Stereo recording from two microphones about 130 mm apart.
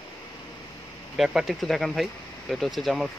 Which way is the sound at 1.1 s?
Centre (ahead or behind).